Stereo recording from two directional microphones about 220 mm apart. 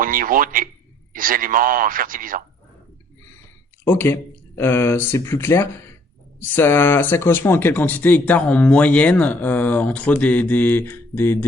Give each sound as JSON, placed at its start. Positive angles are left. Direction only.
{"t": 0.0, "sound": "a man's voice", "side_deg": -40}
{"t": 3.8, "sound": "speech", "side_deg": 10}